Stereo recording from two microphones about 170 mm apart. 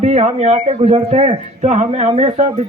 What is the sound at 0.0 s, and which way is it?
A man's voice, 40° right (ahead or behind).